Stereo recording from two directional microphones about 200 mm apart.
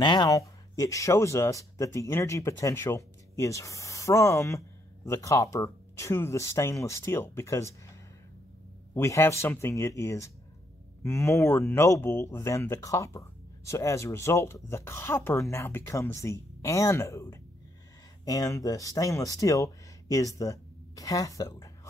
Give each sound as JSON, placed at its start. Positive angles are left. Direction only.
{"t": 0.0, "sound": "speech", "side_deg": 20}